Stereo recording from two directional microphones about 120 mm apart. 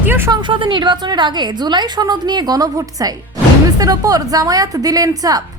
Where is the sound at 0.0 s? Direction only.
20° right (ahead or behind).